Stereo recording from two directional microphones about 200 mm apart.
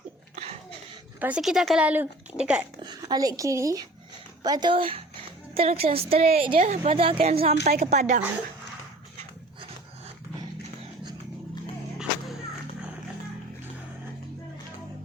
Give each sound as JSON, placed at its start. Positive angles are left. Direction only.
{"t": 1.2, "sound": "speech", "side_deg": -5}
{"t": 2.8, "sound": "a woman's voice", "side_deg": -20}